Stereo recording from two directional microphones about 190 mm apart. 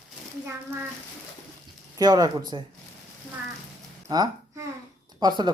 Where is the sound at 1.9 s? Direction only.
20° right (ahead or behind).